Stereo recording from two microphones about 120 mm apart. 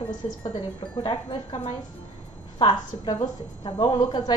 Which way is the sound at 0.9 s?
45° left (ahead or behind).